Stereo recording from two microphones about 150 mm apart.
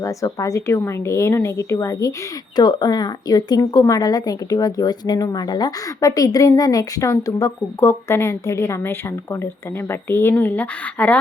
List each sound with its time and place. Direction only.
0.0 s speech: 20° left (ahead or behind)